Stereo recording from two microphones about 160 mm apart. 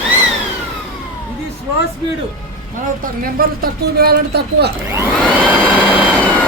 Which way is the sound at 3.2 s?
65° right (ahead or behind).